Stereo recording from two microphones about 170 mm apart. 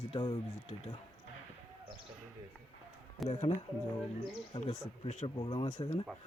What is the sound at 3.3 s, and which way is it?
Speech, 40° left (ahead or behind).